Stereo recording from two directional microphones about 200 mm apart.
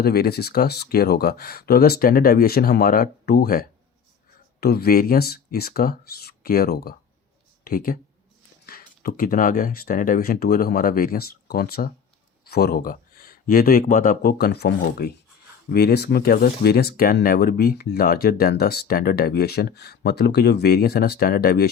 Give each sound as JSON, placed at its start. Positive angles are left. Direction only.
{"t": 0.0, "sound": "speech", "side_deg": 50}
{"t": 9.0, "sound": "speech", "side_deg": 45}